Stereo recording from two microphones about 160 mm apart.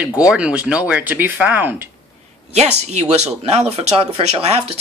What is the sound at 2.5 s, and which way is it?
Speech, 45° right (ahead or behind).